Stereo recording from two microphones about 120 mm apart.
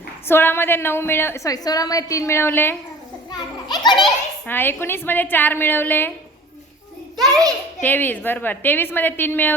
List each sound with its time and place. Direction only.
0.3 s a woman's voice: 20° left (ahead or behind)
3.2 s a child's voice: 35° left (ahead or behind)
4.4 s a woman's voice: 15° left (ahead or behind)
7.8 s a woman's voice: 15° left (ahead or behind)